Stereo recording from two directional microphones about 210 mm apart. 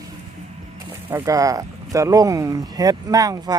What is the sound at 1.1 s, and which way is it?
Speech, 15° right (ahead or behind).